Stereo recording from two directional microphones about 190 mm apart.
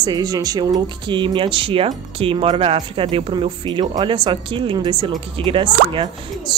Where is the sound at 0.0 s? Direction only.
20° right (ahead or behind).